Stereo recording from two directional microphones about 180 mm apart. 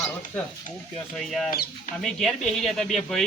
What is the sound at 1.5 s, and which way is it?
Speech, 60° left (ahead or behind).